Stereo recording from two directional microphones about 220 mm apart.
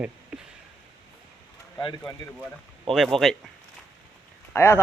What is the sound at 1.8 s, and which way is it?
Speech, 20° left (ahead or behind).